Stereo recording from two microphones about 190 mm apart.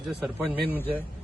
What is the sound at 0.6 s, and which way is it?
Speech, 10° left (ahead or behind).